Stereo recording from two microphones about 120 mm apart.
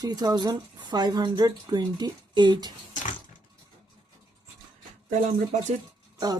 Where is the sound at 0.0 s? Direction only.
30° right (ahead or behind).